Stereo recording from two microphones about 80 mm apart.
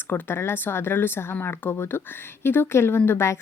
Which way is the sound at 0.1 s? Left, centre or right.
Left.